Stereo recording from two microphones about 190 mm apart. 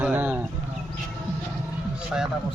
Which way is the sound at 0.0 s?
10° right (ahead or behind).